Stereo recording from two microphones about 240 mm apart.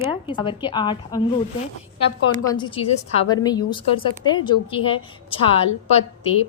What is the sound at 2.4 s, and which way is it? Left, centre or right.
A woman's voice, centre.